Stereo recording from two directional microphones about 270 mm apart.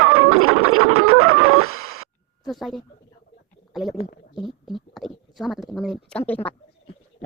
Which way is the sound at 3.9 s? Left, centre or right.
Left.